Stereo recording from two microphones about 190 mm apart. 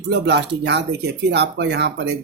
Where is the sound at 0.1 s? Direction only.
60° right (ahead or behind).